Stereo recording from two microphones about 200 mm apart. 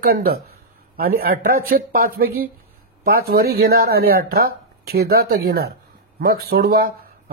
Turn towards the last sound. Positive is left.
turn(degrees=-50)  # may be behind; listen again after turning